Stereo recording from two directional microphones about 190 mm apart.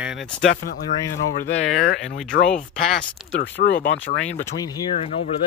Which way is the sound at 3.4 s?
65° left (ahead or behind).